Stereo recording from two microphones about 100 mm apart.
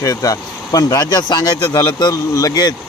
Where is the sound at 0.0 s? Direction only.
35° left (ahead or behind).